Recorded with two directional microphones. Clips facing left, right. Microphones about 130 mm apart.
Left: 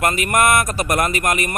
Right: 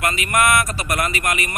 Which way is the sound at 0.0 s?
45° left (ahead or behind).